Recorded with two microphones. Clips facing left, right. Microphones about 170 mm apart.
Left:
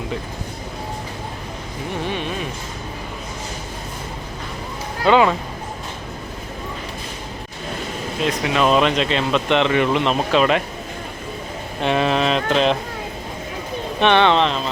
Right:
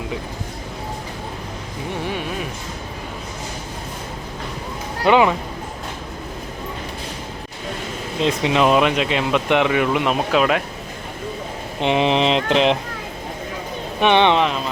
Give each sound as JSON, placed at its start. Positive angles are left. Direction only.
{"t": 5.0, "sound": "speech", "side_deg": -15}
{"t": 8.2, "sound": "speech", "side_deg": -25}
{"t": 11.8, "sound": "a sound", "side_deg": -20}
{"t": 14.0, "sound": "speech", "side_deg": -15}